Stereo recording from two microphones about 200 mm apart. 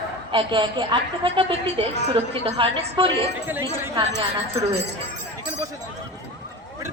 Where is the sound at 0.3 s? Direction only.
25° right (ahead or behind).